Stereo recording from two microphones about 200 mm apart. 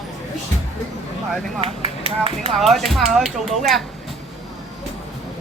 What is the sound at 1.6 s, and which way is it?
Speech, 30° right (ahead or behind).